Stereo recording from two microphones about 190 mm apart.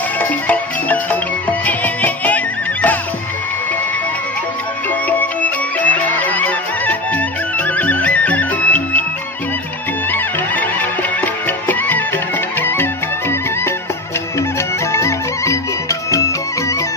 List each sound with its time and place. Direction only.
0.2 s music: 10° left (ahead or behind)
5.0 s music: 10° left (ahead or behind)
10.1 s music: 10° left (ahead or behind)
14.9 s music: 15° left (ahead or behind)